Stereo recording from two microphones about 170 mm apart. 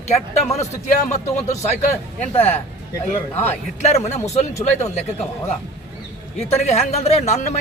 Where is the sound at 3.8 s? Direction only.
40° left (ahead or behind).